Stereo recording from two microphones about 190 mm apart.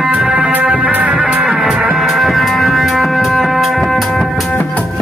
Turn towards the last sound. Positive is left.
turn(degrees=0)  # may be behind; listen again after turning